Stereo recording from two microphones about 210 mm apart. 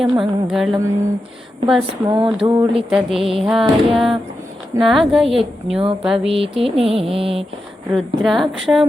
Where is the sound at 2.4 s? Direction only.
15° right (ahead or behind).